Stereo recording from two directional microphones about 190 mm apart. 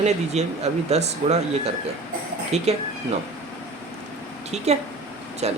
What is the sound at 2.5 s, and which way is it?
Speech, 35° right (ahead or behind).